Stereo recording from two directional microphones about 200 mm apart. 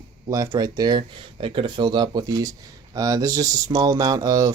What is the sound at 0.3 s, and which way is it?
Speech, 20° right (ahead or behind).